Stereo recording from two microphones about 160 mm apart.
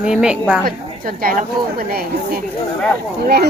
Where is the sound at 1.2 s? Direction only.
65° right (ahead or behind).